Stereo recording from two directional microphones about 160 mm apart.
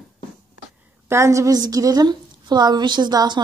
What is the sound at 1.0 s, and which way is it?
A woman's voice, 15° right (ahead or behind).